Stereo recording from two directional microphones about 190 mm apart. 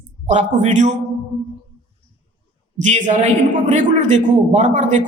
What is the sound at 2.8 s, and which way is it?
A man's voice, 40° right (ahead or behind).